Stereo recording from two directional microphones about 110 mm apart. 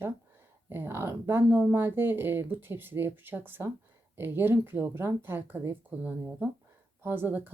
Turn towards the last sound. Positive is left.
turn(degrees=-15)  # may be behind; listen again after turning